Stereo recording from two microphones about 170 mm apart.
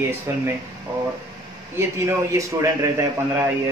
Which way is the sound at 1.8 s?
15° right (ahead or behind).